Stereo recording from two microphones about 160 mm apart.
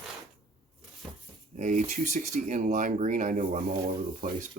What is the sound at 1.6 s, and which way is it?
Speech, 50° right (ahead or behind).